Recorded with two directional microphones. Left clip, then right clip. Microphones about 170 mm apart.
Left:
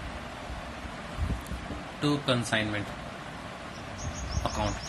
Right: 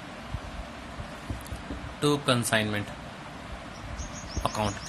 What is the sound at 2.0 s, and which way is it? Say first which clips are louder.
Speech: right 3 dB; 30° right (ahead or behind).